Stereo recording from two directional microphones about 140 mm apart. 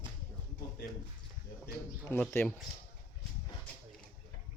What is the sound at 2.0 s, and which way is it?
Speech, 15° left (ahead or behind).